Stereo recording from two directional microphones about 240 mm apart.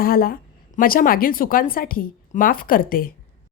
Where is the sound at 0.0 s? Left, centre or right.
Left.